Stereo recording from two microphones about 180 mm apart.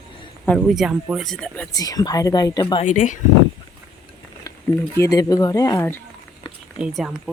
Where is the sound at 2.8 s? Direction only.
45° left (ahead or behind).